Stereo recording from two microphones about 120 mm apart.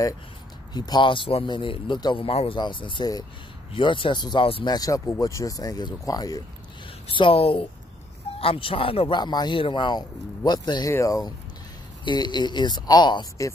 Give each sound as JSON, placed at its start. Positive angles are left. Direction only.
{"t": 0.7, "sound": "speech", "side_deg": 35}
{"t": 2.2, "sound": "speech", "side_deg": 50}
{"t": 4.7, "sound": "speech", "side_deg": 30}
{"t": 7.2, "sound": "speech", "side_deg": 50}
{"t": 9.2, "sound": "speech", "side_deg": 35}